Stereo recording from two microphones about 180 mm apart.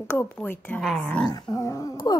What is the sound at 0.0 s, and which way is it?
Speech, 15° left (ahead or behind).